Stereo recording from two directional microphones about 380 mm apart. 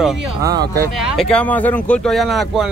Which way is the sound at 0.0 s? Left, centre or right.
Centre.